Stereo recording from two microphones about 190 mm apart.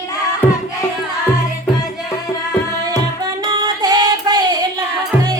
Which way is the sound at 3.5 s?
20° right (ahead or behind).